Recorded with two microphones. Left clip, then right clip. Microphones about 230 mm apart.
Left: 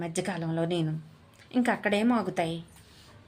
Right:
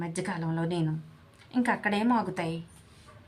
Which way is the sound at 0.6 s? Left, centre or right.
Centre.